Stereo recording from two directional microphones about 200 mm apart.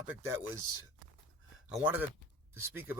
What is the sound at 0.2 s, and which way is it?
Speech, 15° right (ahead or behind).